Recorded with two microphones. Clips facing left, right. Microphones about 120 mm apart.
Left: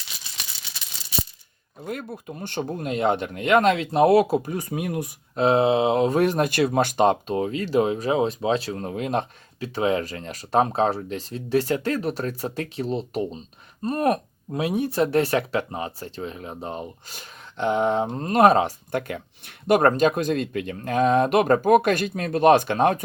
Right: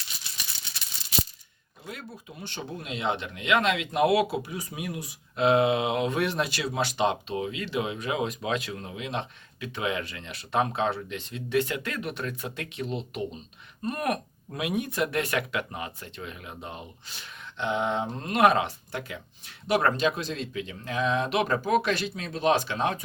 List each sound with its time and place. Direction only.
1.8 s speech: 50° left (ahead or behind)
5.4 s speech: 35° left (ahead or behind)
18.9 s speech: 55° left (ahead or behind)